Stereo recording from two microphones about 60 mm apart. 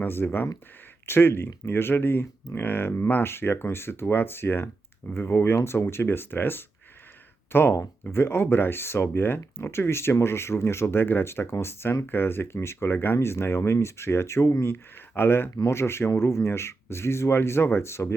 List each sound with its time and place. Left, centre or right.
0.0 s speech: left
15.4 s speech: left